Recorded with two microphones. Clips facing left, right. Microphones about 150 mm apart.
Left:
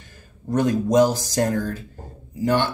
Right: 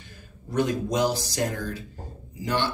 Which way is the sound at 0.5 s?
45° left (ahead or behind).